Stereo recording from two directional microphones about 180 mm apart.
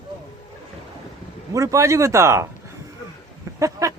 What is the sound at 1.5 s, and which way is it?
Speech, 15° right (ahead or behind).